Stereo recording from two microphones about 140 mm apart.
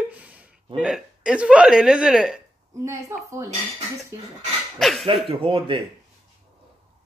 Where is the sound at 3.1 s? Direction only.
20° right (ahead or behind).